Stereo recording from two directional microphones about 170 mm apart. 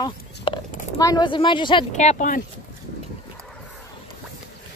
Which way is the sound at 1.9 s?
40° left (ahead or behind).